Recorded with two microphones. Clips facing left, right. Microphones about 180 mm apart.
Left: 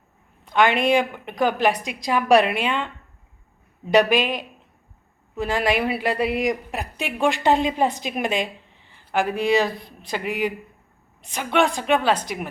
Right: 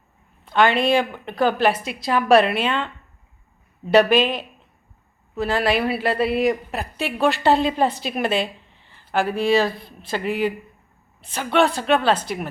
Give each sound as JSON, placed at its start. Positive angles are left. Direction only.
{"t": 0.4, "sound": "a woman's voice", "side_deg": 15}